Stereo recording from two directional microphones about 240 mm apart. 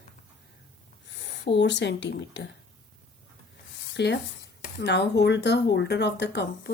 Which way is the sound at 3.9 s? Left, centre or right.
Left.